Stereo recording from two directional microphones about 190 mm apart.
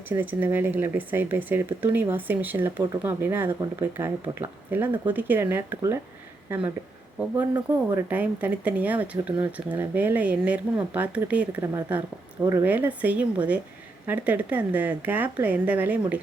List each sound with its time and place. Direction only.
0.1 s speech: 10° right (ahead or behind)
8.1 s speech: 10° right (ahead or behind)